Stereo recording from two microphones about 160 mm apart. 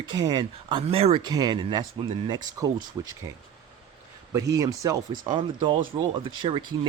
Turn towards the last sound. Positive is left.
turn(degrees=-30)  # may be behind; listen again after turning